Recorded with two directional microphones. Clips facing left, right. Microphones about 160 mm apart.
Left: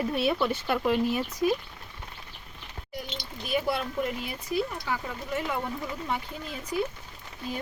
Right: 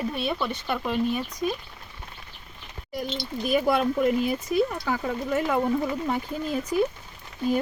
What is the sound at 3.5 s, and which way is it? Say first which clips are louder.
Speech: right 6 dB; 50° right (ahead or behind).